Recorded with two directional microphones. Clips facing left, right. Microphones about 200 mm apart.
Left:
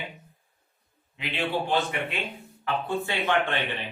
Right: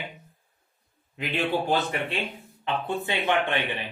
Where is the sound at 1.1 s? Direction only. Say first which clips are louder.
Right 2 dB; 45° right (ahead or behind).